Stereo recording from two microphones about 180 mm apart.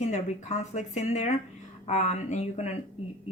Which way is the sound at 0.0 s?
40° left (ahead or behind).